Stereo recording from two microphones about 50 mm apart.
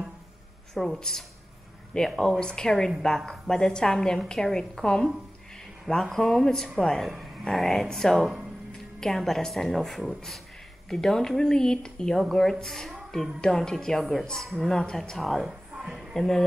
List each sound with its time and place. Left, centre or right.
0.7 s a woman's voice: centre
15.4 s music: centre
16.0 s music: centre